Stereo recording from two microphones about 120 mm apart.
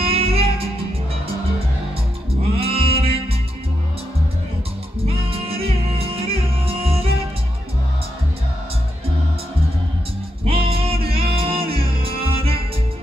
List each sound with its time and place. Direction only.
0.0 s music: 55° right (ahead or behind)
2.6 s music: 55° right (ahead or behind)
5.5 s music: 55° right (ahead or behind)
10.4 s music: 55° right (ahead or behind)